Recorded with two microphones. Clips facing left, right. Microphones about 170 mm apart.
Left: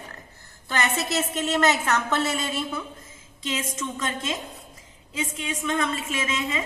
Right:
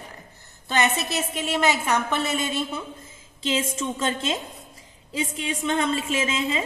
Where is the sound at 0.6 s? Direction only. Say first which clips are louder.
Right 2 dB; 20° right (ahead or behind).